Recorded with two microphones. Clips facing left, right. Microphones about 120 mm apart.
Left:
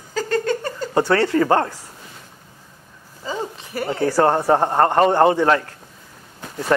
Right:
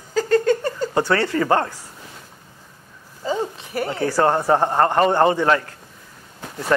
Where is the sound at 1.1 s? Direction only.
30° left (ahead or behind).